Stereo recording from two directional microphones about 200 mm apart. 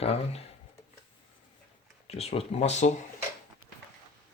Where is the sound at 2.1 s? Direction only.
30° left (ahead or behind).